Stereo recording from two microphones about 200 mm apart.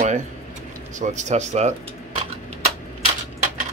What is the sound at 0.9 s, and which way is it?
Speech, 35° right (ahead or behind).